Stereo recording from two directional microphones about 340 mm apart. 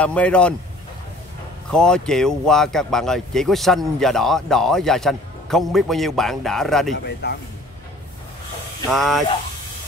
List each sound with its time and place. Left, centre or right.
0.0 s speech: centre
1.7 s speech: centre
7.2 s speech: left
8.9 s speech: centre